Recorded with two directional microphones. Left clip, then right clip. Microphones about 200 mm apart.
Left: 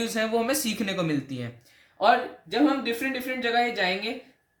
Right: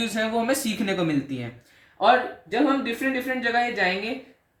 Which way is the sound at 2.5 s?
45° left (ahead or behind).